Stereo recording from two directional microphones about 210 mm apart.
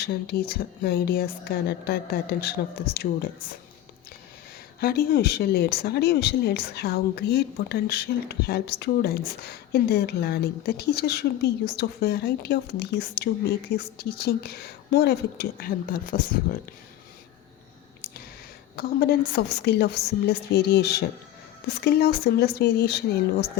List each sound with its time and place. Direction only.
0.0 s speech: 50° left (ahead or behind)
4.8 s speech: 45° left (ahead or behind)
18.8 s speech: 45° left (ahead or behind)